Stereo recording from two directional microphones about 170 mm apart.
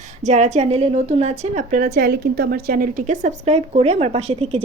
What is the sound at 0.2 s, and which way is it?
A woman's voice, 45° right (ahead or behind).